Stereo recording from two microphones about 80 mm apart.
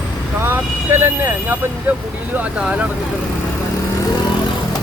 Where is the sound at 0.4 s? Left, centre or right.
Right.